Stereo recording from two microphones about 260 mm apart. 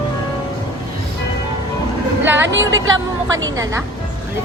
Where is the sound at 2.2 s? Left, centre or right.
Centre.